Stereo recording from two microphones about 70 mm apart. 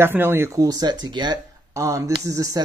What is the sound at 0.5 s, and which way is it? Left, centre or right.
Speech, right.